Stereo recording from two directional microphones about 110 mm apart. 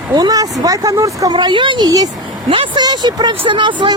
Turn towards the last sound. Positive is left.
turn(degrees=-45)  # may be behind; listen again after turning